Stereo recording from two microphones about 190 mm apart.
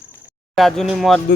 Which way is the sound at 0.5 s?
Centre (ahead or behind).